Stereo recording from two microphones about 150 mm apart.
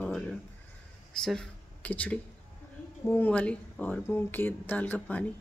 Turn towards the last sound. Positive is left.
turn(degrees=10)  # may be behind; listen again after turning